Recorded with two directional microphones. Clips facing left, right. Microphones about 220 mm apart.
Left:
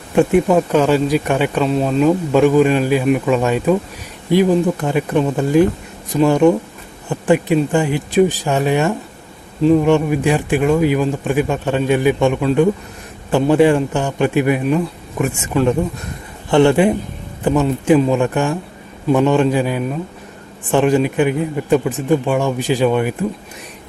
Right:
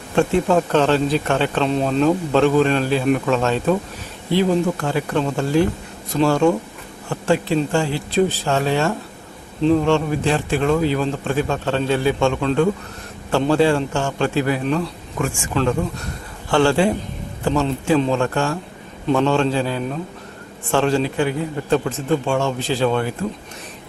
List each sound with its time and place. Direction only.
0.2 s speech: 15° left (ahead or behind)
15.3 s a man's voice: 20° left (ahead or behind)